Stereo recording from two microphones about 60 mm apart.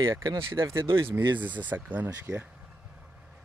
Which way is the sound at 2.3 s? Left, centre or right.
Right.